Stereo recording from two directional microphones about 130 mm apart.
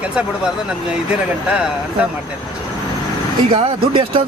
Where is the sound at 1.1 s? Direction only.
5° right (ahead or behind).